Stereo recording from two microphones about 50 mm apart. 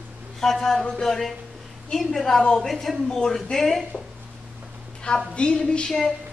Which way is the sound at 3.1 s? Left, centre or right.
Centre.